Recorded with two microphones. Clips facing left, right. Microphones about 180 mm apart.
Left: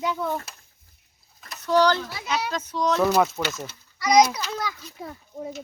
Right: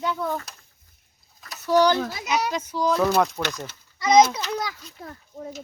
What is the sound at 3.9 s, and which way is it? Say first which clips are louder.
Speech: right 2 dB; 25° right (ahead or behind).